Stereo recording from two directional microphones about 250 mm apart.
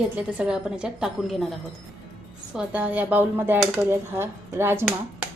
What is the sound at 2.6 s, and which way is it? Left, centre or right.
Speech, centre.